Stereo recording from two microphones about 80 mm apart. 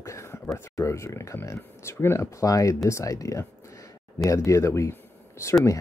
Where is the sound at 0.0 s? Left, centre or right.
Left.